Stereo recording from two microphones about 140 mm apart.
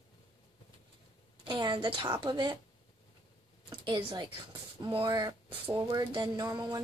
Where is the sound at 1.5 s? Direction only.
35° right (ahead or behind).